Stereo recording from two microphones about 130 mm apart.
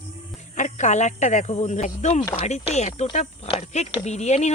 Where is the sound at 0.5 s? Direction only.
70° left (ahead or behind).